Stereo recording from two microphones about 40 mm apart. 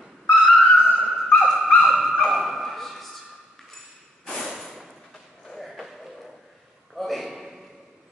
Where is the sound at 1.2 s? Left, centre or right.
Centre.